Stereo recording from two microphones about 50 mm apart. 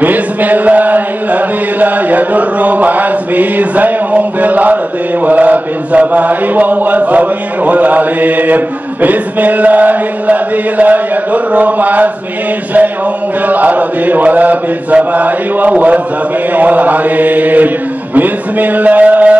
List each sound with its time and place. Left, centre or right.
0.0 s chant: right
5.2 s mantra: right
13.5 s mantra: right